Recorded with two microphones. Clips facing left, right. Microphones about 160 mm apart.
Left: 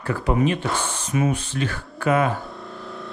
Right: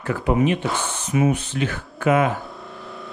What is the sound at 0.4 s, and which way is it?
Speech, 15° right (ahead or behind).